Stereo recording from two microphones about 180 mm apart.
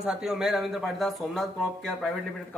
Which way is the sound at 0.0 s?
5° right (ahead or behind).